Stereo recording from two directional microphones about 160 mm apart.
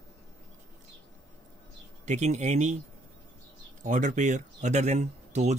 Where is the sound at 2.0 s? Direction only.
45° right (ahead or behind).